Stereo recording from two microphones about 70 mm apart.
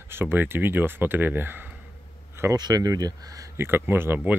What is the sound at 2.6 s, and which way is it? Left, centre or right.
Speech, right.